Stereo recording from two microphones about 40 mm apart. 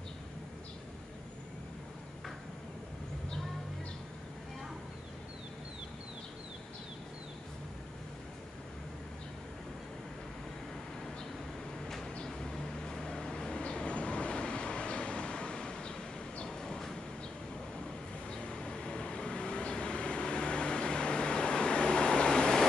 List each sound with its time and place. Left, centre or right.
12.3 s vehicle: centre
16.4 s a sound: centre
18.3 s vehicle: centre